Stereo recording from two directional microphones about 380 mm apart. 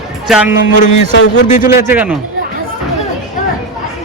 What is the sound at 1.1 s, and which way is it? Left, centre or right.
Speech, left.